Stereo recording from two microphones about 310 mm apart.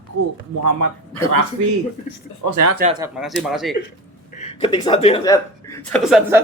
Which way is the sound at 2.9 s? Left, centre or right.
Centre.